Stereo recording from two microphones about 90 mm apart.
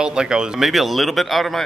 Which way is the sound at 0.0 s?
10° right (ahead or behind).